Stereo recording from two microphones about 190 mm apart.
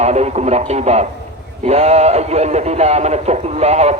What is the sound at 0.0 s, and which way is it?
A man's voice, 35° right (ahead or behind).